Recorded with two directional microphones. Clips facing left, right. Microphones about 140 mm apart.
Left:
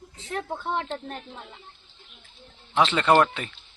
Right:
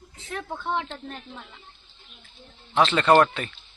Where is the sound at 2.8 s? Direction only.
15° left (ahead or behind).